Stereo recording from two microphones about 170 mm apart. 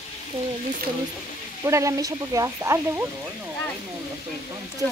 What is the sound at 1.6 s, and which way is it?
Speech, 20° right (ahead or behind).